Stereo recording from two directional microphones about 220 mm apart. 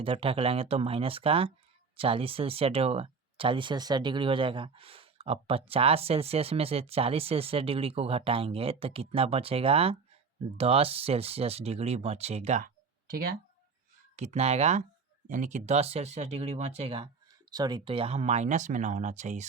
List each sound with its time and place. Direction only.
0.0 s speech: 25° right (ahead or behind); by 13.3 s 40° right (ahead or behind)
14.2 s speech: 30° right (ahead or behind)